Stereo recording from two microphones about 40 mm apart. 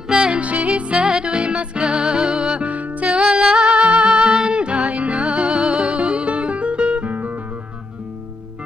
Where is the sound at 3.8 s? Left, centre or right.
Right.